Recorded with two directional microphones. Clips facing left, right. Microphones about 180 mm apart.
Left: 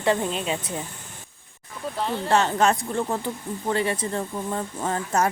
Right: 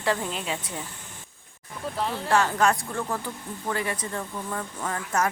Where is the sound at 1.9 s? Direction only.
Centre (ahead or behind).